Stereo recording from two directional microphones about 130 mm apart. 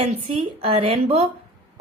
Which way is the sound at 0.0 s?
45° right (ahead or behind).